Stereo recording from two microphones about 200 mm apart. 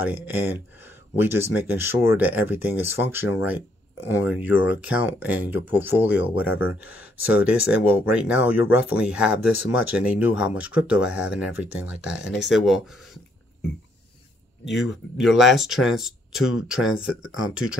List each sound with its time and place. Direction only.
0.0 s speech: 10° right (ahead or behind)
14.6 s speech: 65° left (ahead or behind)
14.9 s speech: centre (ahead or behind)